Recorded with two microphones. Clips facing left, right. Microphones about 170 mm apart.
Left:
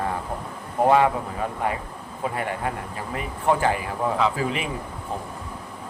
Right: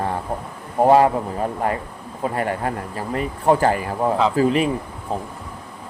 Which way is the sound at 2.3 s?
45° right (ahead or behind).